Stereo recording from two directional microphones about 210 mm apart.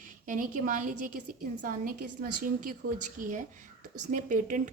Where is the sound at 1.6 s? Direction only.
40° right (ahead or behind).